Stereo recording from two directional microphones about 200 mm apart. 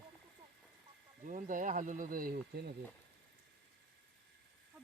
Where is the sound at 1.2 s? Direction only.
40° right (ahead or behind).